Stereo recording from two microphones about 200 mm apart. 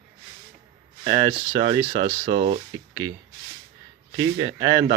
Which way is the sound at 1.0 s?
25° right (ahead or behind).